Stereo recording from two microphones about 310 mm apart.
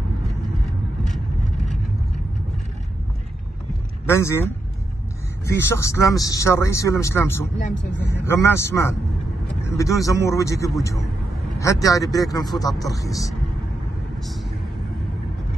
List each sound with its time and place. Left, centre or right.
1.0 s vehicle: centre
4.0 s speech: centre